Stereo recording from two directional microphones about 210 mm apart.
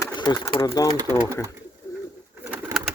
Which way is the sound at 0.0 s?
20° left (ahead or behind).